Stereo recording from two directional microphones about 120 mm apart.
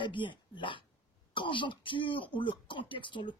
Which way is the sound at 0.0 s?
40° left (ahead or behind).